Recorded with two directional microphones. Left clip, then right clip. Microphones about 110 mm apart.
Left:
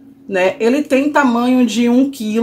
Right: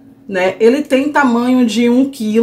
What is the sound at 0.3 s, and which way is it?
Speech, 15° left (ahead or behind).